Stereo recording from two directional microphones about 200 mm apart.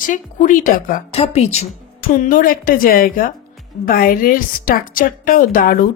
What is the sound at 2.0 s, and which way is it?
A woman's voice, 45° left (ahead or behind).